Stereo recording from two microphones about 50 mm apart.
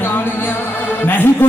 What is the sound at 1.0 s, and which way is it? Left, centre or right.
Music, left.